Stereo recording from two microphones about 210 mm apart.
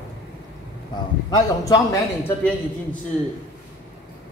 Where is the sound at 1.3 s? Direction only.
15° left (ahead or behind).